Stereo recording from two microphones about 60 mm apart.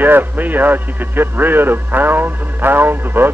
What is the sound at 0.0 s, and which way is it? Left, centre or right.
A man's voice, right.